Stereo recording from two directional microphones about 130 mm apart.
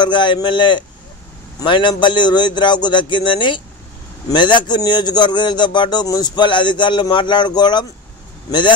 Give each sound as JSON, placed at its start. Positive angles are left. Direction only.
{"t": 0.0, "sound": "a man's voice", "side_deg": 35}